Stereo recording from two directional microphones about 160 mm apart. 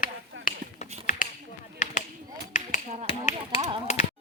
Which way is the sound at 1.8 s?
55° left (ahead or behind).